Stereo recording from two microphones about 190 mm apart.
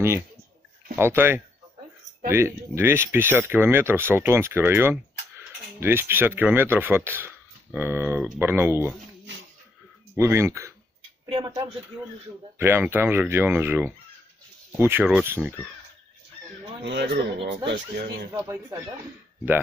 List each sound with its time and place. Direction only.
0.9 s speech: 10° right (ahead or behind)
10.1 s speech: 15° right (ahead or behind)
16.8 s speech: 65° right (ahead or behind)
18.3 s speech: 15° right (ahead or behind)